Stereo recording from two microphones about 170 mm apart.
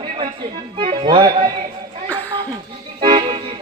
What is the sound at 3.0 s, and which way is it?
Music, 30° right (ahead or behind).